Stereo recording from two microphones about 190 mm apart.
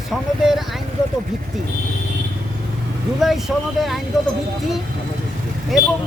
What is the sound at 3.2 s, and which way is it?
Speech, centre (ahead or behind).